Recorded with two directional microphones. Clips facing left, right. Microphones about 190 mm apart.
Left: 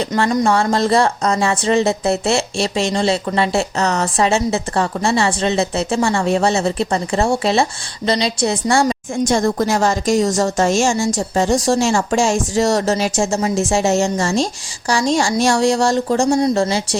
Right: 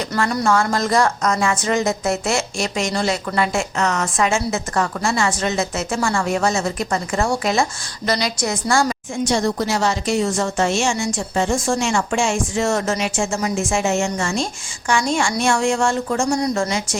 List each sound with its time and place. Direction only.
0.2 s speech: 20° left (ahead or behind)
0.4 s a woman's voice: 30° left (ahead or behind)
9.2 s a woman's voice: 50° left (ahead or behind)